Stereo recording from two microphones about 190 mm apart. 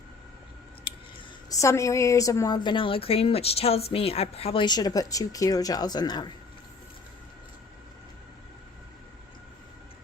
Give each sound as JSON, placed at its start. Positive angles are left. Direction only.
{"t": 1.5, "sound": "a woman's voice", "side_deg": 15}